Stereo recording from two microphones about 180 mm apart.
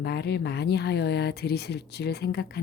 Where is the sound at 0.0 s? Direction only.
65° left (ahead or behind).